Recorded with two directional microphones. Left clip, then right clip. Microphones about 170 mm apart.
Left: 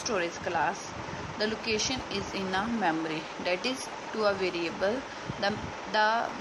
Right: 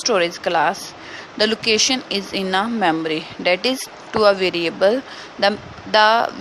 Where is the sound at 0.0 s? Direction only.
55° right (ahead or behind).